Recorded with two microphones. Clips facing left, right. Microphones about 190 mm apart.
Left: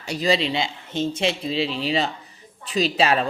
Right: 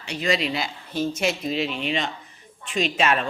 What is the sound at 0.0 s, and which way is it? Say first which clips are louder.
A woman's voice: left 3 dB; 40° left (ahead or behind).